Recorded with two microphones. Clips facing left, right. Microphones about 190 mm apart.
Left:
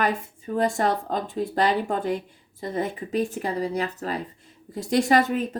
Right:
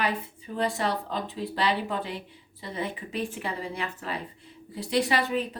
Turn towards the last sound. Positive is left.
turn(degrees=45)  # may be behind; listen again after turning